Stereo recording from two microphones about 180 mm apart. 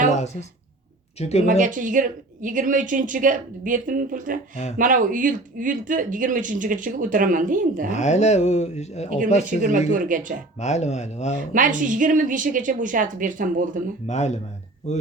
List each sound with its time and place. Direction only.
1.2 s speech: 35° left (ahead or behind)
1.5 s speech: 45° right (ahead or behind)
7.9 s speech: 40° left (ahead or behind)
9.4 s speech: 45° right (ahead or behind)
10.6 s speech: 40° left (ahead or behind)
11.3 s speech: 45° right (ahead or behind)
14.1 s speech: 40° left (ahead or behind)